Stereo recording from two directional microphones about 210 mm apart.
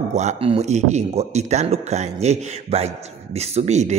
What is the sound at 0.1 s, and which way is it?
Speech, 35° right (ahead or behind).